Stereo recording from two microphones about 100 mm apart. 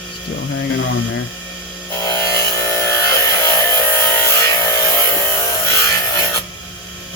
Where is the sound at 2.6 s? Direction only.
25° left (ahead or behind).